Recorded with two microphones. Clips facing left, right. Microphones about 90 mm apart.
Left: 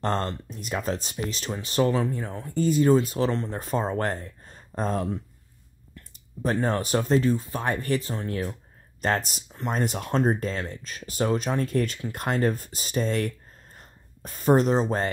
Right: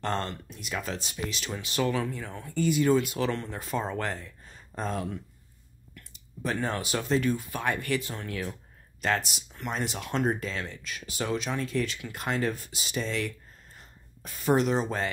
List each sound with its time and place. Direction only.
0.0 s speech: 40° left (ahead or behind)
6.1 s speech: 40° left (ahead or behind)
7.2 s speech: 30° left (ahead or behind)